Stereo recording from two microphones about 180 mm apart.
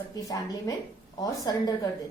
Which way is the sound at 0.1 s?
20° left (ahead or behind).